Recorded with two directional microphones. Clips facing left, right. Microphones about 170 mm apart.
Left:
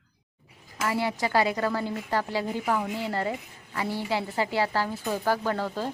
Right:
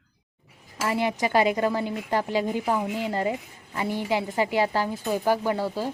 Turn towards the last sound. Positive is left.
turn(degrees=-10)  # may be behind; listen again after turning